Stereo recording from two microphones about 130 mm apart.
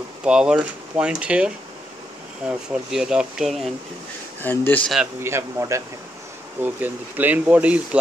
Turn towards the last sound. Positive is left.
turn(degrees=-10)  # may be behind; listen again after turning